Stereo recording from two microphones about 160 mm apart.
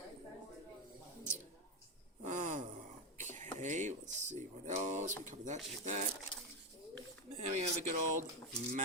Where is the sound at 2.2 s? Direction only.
50° right (ahead or behind).